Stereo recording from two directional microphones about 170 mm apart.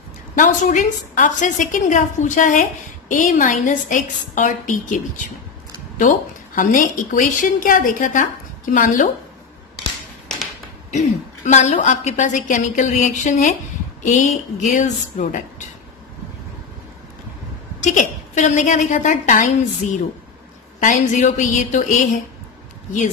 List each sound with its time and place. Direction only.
0.4 s a woman's voice: 45° left (ahead or behind)
10.9 s a woman's voice: 45° left (ahead or behind)
17.8 s a woman's voice: 45° left (ahead or behind)
20.8 s a woman's voice: 45° left (ahead or behind)